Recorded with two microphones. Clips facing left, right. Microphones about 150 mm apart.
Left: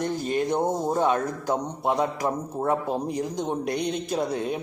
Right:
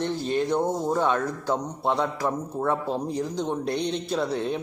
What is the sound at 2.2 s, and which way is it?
A man's voice, 10° left (ahead or behind).